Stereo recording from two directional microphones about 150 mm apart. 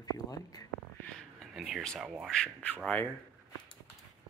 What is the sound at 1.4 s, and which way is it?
Speech, centre (ahead or behind).